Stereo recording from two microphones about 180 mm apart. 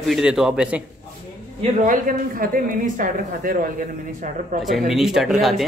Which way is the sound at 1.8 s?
50° right (ahead or behind).